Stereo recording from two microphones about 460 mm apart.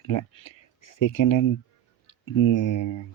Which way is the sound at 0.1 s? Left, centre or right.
Left.